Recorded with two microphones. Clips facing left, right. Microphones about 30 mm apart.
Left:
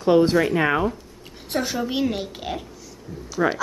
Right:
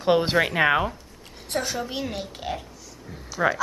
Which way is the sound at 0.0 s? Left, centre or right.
Right.